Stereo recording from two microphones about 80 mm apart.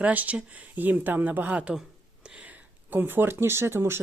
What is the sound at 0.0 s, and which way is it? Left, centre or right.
Speech, centre.